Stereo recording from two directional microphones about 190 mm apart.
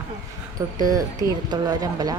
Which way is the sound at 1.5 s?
20° right (ahead or behind).